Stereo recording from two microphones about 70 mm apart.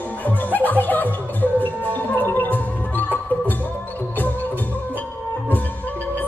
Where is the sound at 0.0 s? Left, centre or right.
Left.